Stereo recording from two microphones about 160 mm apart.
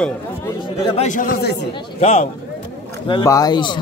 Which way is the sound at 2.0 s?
40° left (ahead or behind).